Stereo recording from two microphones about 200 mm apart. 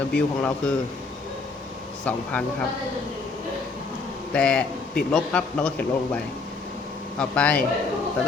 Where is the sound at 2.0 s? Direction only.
5° left (ahead or behind).